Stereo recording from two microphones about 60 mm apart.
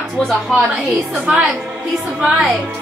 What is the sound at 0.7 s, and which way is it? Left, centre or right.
Speech, centre.